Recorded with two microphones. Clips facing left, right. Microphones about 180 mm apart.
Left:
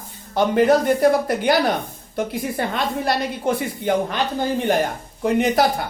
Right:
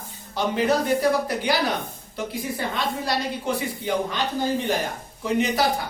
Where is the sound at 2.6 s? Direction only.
60° left (ahead or behind).